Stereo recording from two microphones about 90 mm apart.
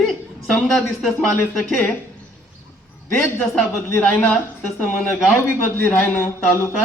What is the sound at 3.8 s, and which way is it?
Speech, 30° left (ahead or behind).